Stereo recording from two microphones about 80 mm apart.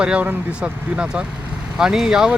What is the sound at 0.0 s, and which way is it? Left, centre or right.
Speech, centre.